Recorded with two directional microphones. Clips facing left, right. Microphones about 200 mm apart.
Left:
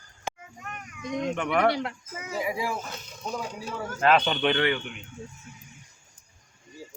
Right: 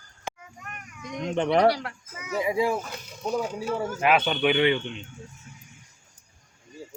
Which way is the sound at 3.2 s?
10° right (ahead or behind).